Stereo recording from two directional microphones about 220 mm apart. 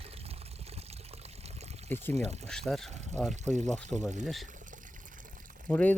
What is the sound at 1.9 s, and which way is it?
Speech, 10° left (ahead or behind).